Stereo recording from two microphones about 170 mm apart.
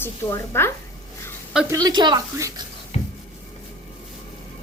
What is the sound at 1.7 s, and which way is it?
Speech, 20° right (ahead or behind).